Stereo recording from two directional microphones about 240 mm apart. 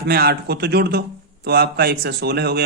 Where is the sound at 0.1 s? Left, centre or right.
Right.